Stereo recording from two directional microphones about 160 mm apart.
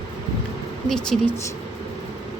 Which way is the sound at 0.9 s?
5° left (ahead or behind).